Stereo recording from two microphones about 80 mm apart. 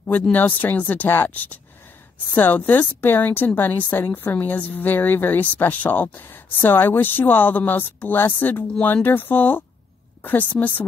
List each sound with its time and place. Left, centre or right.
0.3 s a woman's voice: left